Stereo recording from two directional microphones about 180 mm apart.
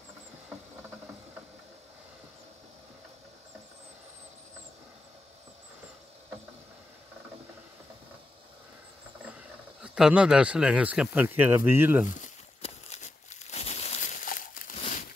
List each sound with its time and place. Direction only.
9.8 s speech: 5° right (ahead or behind)
12.2 s crumpling: 40° left (ahead or behind)